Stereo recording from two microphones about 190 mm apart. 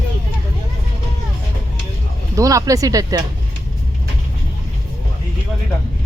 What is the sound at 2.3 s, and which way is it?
Speech, 20° right (ahead or behind).